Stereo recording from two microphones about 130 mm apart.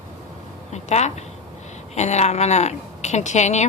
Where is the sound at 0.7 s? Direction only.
60° left (ahead or behind).